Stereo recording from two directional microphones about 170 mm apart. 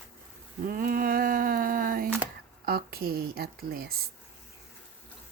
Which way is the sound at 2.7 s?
65° right (ahead or behind).